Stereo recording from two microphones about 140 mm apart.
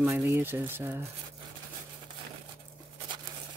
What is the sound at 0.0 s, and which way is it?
Speech, 15° right (ahead or behind).